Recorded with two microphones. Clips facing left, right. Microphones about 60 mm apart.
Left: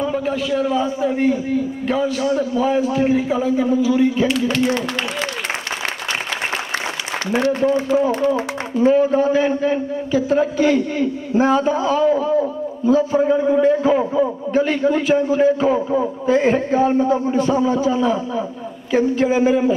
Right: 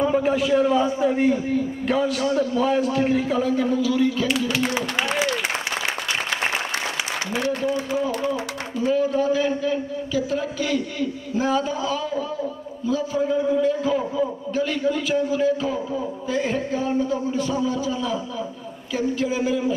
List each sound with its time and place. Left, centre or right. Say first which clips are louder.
0.0 s a man's voice: right 1 dB; centre; by 4.3 s left
8.0 s a man's voice: left 6 dB; left